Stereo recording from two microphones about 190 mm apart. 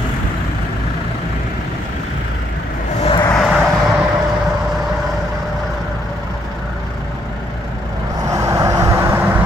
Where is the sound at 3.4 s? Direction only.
Centre (ahead or behind).